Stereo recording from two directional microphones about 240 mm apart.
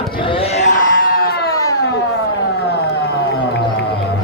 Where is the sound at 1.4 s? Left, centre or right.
Centre.